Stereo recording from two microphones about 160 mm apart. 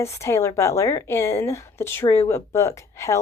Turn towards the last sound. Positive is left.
turn(degrees=20)  # may be behind; listen again after turning